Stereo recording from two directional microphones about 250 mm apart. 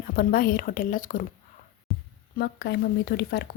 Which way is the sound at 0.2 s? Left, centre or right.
Left.